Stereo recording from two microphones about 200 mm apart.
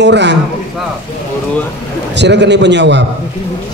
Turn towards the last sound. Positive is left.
turn(degrees=-60)  # may be behind; listen again after turning